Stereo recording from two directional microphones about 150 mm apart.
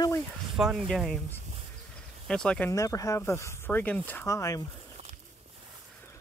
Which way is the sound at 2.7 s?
20° left (ahead or behind).